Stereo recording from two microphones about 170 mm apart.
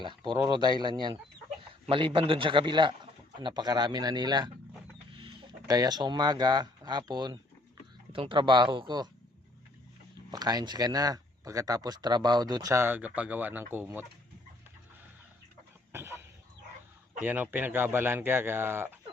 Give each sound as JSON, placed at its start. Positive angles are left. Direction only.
{"t": 0.0, "sound": "speech", "side_deg": -25}
{"t": 10.3, "sound": "a man's voice", "side_deg": -25}
{"t": 15.9, "sound": "a sound", "side_deg": -15}
{"t": 17.2, "sound": "a man's voice", "side_deg": -10}